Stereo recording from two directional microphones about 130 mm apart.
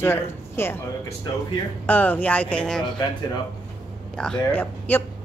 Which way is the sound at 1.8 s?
15° left (ahead or behind).